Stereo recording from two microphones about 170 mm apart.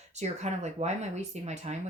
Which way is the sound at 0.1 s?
40° right (ahead or behind).